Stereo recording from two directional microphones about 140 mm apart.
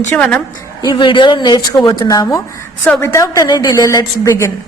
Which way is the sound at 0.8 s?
30° left (ahead or behind).